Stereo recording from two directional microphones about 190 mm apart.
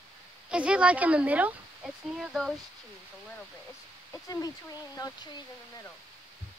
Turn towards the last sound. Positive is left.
turn(degrees=20)  # may be behind; listen again after turning